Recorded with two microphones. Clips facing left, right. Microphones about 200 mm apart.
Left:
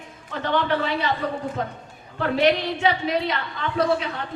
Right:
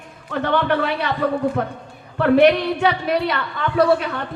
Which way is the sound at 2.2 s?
60° right (ahead or behind).